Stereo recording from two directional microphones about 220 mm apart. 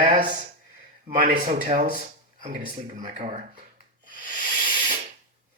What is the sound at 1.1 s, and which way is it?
Speech, 40° right (ahead or behind).